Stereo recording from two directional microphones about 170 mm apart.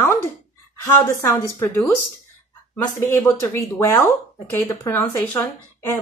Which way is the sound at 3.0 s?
15° left (ahead or behind).